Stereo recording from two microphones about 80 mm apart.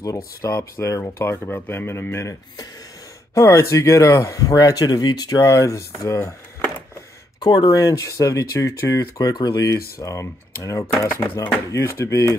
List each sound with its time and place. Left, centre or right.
0.0 s speech: left
3.3 s speech: left
6.1 s a sound: left
7.3 s speech: left